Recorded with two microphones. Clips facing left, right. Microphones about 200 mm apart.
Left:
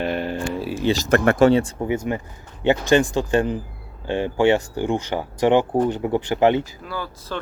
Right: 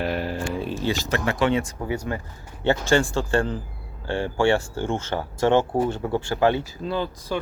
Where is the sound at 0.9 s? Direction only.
55° left (ahead or behind).